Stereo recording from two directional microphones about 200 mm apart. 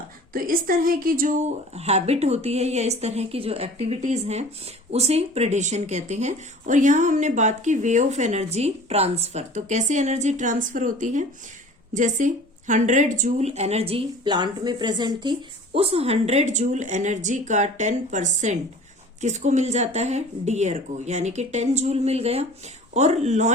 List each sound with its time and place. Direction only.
0.3 s a woman's voice: 45° right (ahead or behind)